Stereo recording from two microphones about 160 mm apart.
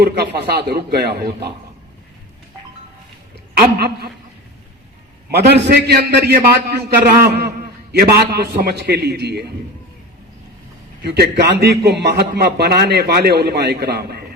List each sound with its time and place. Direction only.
0.0 s a man's voice: 85° right
3.5 s a man's voice: 85° right
5.4 s a man's voice: 90° right
7.3 s a man's voice: 90° right
7.9 s a man's voice: 80° right
11.0 s a man's voice: 90° right